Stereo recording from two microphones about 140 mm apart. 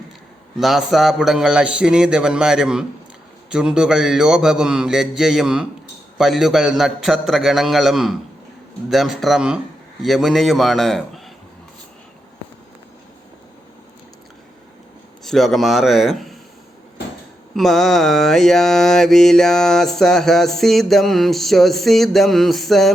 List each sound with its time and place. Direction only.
0.6 s mantra: centre (ahead or behind)
15.2 s a man's voice: centre (ahead or behind)
17.5 s mantra: centre (ahead or behind)